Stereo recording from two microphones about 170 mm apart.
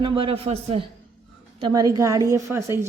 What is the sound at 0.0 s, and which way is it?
Speech, 30° right (ahead or behind).